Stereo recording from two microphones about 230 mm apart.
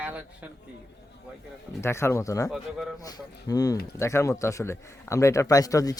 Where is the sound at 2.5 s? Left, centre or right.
Centre.